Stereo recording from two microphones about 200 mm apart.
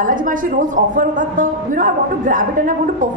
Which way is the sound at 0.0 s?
40° right (ahead or behind).